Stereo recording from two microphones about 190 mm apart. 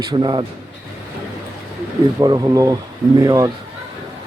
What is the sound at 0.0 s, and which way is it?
Speech, 20° right (ahead or behind).